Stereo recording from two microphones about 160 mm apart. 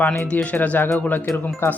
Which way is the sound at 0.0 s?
10° left (ahead or behind).